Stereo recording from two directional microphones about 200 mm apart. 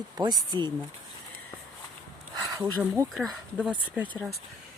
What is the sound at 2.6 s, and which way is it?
Speech, 10° right (ahead or behind).